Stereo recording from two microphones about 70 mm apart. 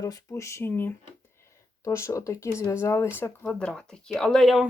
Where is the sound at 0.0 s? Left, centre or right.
Left.